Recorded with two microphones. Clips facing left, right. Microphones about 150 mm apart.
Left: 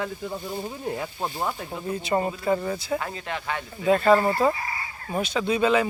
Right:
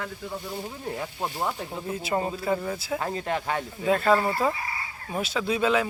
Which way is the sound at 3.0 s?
40° right (ahead or behind).